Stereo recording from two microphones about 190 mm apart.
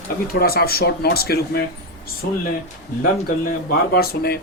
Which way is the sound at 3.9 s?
55° left (ahead or behind).